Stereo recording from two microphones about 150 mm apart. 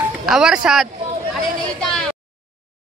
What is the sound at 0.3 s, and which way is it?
Speech, 5° right (ahead or behind).